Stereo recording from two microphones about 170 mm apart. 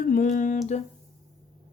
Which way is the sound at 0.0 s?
50° left (ahead or behind).